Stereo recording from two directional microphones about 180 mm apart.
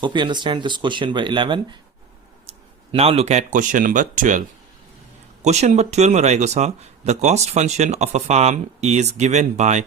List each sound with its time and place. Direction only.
0.0 s speech: 25° right (ahead or behind)
2.9 s speech: 35° right (ahead or behind)